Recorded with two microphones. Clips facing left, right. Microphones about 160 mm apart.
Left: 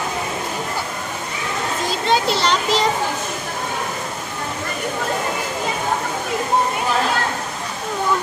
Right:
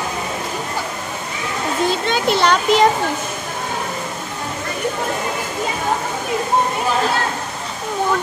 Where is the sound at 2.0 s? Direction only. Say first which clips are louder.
Left 1 dB; 55° right (ahead or behind).